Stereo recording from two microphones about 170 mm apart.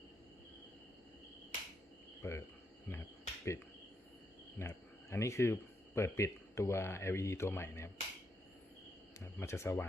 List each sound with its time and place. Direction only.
2.2 s speech: 15° left (ahead or behind)
2.9 s cricket: 15° left (ahead or behind)
4.5 s speech: 15° left (ahead or behind)
9.1 s speech: 15° left (ahead or behind)